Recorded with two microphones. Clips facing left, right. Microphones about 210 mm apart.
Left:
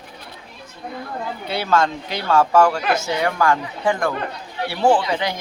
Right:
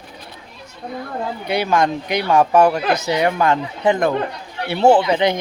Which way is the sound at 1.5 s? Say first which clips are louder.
Right 2 dB; 15° right (ahead or behind).